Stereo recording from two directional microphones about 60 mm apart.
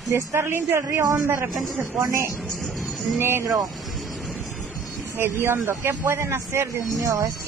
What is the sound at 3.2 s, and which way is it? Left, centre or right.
Speech, right.